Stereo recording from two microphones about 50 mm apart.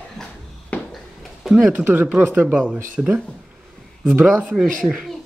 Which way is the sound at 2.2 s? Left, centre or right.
Right.